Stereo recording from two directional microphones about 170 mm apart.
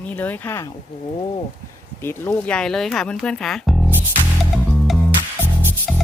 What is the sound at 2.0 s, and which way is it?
Speech, 15° left (ahead or behind).